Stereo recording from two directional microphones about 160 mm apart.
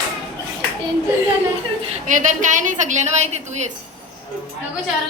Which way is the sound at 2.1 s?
50° right (ahead or behind).